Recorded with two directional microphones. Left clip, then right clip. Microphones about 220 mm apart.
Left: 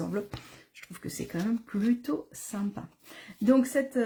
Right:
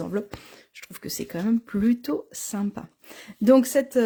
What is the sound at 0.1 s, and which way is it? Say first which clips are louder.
Speech: right 4 dB; 40° right (ahead or behind).